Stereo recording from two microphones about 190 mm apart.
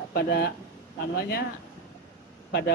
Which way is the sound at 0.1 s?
55° left (ahead or behind).